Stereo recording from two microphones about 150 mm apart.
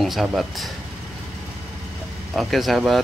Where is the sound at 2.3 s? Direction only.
Centre (ahead or behind).